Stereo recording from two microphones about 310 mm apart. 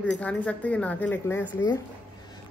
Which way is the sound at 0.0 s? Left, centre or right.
Centre.